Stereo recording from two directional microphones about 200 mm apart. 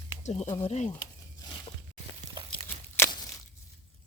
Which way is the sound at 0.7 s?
35° left (ahead or behind).